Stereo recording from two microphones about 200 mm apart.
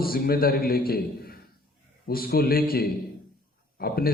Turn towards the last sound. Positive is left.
turn(degrees=50)  # may be behind; listen again after turning